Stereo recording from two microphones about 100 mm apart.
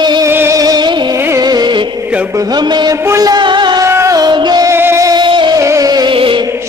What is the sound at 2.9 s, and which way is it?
Music, 30° right (ahead or behind).